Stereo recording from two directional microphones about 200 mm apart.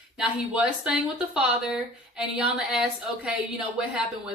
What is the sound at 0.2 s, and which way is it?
Speech, 5° right (ahead or behind).